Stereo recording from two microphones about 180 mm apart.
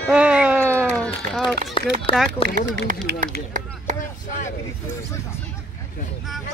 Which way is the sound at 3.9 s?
45° left (ahead or behind).